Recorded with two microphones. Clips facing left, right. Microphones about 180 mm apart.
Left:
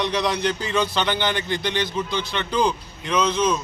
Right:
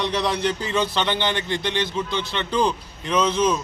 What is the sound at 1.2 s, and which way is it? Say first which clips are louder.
Speech: even; 25° right (ahead or behind).